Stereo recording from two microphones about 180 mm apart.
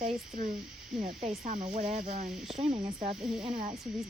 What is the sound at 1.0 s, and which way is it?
Speech, 35° right (ahead or behind).